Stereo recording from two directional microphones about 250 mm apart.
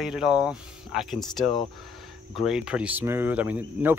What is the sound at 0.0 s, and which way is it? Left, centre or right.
Speech, centre.